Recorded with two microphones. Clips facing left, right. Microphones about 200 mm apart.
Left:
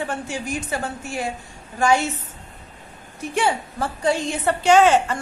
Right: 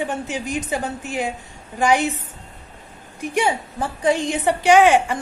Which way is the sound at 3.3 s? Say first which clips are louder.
Right 1 dB; 15° right (ahead or behind).